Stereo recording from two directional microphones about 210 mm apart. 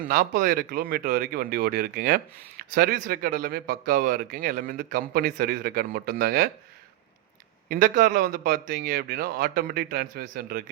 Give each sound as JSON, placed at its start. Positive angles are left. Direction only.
{"t": 0.1, "sound": "speech", "side_deg": -45}
{"t": 7.7, "sound": "speech", "side_deg": -40}